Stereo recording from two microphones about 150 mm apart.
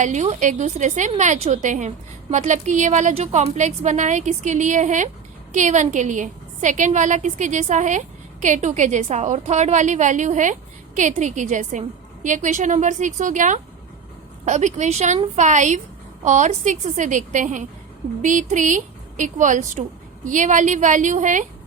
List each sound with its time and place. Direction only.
0.0 s a woman's voice: 50° right (ahead or behind)